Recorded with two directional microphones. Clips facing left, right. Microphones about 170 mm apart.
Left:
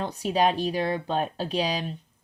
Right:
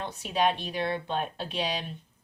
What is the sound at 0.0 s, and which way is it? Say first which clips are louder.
Speech: left 4 dB; 35° left (ahead or behind).